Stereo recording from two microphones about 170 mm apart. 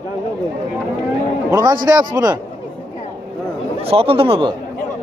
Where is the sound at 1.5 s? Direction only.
25° right (ahead or behind).